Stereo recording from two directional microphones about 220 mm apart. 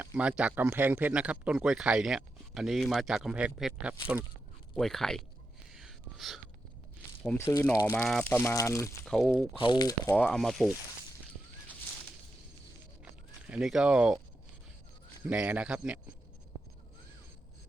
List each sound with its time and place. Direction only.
0.0 s speech: 5° right (ahead or behind)
5.7 s a sound: centre (ahead or behind)
7.3 s speech: 10° left (ahead or behind)
9.0 s speech: centre (ahead or behind)
9.6 s speech: 20° left (ahead or behind)
10.2 s speech: 5° left (ahead or behind)
13.5 s speech: centre (ahead or behind)
15.3 s speech: 5° right (ahead or behind)